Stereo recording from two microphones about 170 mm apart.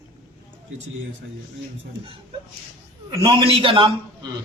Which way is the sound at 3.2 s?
30° right (ahead or behind).